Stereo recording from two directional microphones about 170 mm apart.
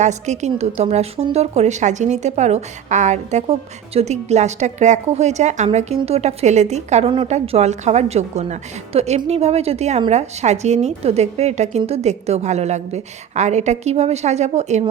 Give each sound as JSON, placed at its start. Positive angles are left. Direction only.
{"t": 0.0, "sound": "a woman's voice", "side_deg": -45}